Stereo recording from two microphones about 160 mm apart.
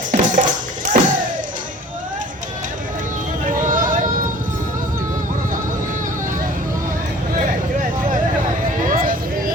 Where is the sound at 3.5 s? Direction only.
55° right (ahead or behind).